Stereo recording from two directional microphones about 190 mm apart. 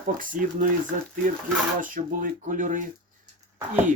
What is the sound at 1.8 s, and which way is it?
Speech, 45° right (ahead or behind).